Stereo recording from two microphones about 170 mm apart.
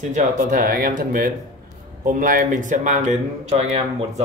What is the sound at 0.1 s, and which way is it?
Speech, 45° right (ahead or behind).